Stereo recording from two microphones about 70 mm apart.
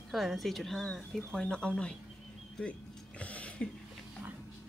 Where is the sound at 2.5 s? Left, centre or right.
Centre.